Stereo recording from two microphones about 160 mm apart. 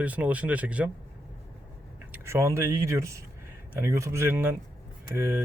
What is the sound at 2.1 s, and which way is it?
Speech, 15° right (ahead or behind).